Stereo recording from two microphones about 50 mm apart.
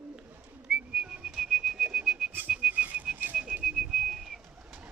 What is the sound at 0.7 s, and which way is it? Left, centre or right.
Whistling, centre.